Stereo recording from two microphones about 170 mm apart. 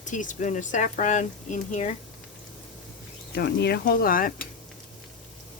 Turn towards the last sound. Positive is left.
turn(degrees=55)  # may be behind; listen again after turning